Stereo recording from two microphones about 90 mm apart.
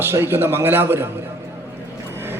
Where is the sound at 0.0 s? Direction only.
25° right (ahead or behind).